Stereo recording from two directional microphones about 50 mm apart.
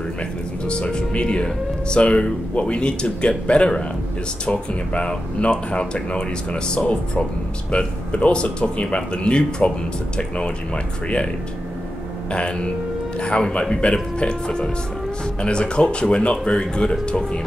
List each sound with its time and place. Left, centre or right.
0.7 s speech: centre
12.3 s speech: left